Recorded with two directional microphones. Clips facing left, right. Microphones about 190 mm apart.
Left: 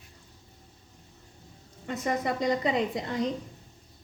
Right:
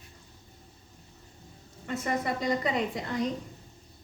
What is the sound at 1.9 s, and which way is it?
A woman's voice, 20° left (ahead or behind).